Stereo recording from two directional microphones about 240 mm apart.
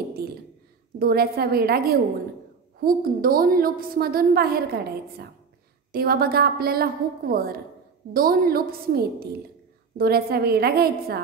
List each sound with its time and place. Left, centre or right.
0.9 s a woman's voice: right